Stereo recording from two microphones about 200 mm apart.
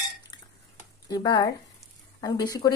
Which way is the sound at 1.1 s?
20° left (ahead or behind).